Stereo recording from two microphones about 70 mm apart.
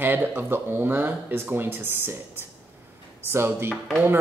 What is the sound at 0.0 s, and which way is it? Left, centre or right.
Speech, right.